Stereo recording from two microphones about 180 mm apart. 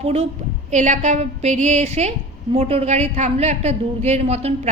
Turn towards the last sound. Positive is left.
turn(degrees=-35)  # may be behind; listen again after turning